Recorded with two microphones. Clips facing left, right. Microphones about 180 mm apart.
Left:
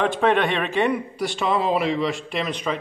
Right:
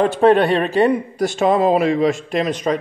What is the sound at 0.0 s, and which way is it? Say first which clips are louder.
A man's voice: right 6 dB; 40° right (ahead or behind).